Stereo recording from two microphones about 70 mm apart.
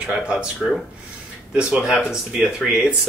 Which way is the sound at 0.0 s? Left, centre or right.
Centre.